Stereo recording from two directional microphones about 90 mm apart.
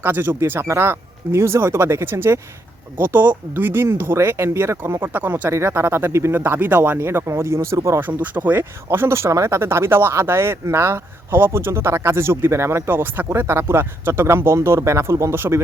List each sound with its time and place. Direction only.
0.0 s speech: 25° right (ahead or behind)
7.9 s speech: 20° right (ahead or behind)